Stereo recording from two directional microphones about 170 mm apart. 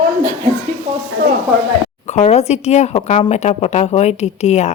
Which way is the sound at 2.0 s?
40° left (ahead or behind).